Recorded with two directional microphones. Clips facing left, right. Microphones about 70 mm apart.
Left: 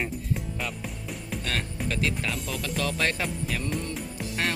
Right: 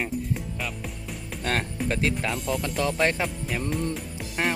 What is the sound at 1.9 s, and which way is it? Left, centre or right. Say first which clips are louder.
Speech: right 3 dB; right.